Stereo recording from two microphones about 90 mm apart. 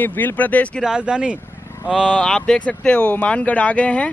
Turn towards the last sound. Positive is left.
turn(degrees=15)  # may be behind; listen again after turning